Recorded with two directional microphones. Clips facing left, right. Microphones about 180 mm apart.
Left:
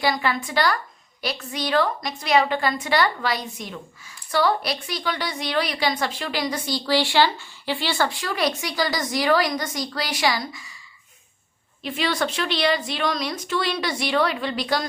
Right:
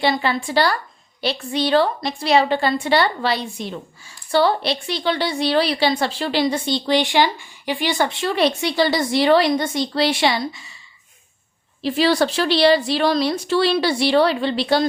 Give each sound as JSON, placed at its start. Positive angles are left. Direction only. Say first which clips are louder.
{"t": 0.0, "sound": "a woman's voice", "louder": "right 3 dB", "side_deg": -30}
{"t": 11.8, "sound": "speech", "louder": "right 7 dB", "side_deg": -35}